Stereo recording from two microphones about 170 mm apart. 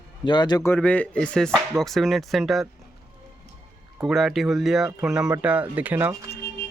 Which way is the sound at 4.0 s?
Centre (ahead or behind).